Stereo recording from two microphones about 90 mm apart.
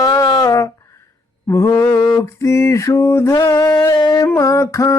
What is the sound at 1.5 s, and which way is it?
Mantra, 30° left (ahead or behind).